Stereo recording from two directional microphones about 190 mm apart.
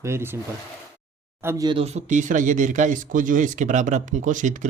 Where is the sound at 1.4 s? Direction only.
20° right (ahead or behind).